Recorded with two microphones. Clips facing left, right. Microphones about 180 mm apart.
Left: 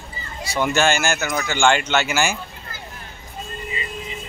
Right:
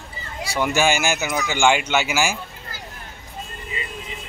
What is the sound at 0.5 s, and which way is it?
Speech, 10° right (ahead or behind).